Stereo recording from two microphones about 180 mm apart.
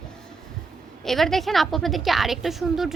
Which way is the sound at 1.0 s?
Centre (ahead or behind).